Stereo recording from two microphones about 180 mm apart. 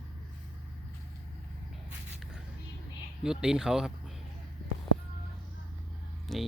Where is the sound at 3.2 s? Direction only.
5° right (ahead or behind).